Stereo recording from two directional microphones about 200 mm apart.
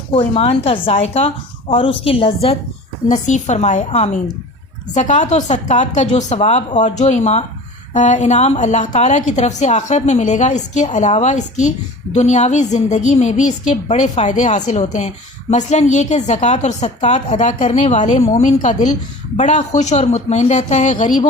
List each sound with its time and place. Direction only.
0.1 s a woman's voice: 30° left (ahead or behind)